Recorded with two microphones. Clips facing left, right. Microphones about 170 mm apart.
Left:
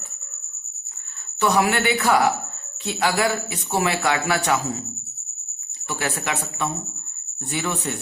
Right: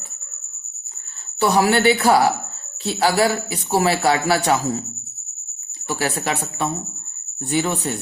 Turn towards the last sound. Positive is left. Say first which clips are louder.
# right 5 dB
turn(degrees=-35)  # may be behind; listen again after turning